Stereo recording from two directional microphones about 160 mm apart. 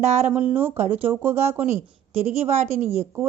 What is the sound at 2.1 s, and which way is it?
Speech, 40° right (ahead or behind).